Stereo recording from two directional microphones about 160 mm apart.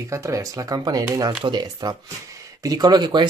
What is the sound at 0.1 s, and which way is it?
Speech, 20° right (ahead or behind).